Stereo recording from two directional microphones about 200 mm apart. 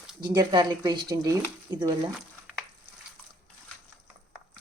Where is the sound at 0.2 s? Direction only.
20° right (ahead or behind).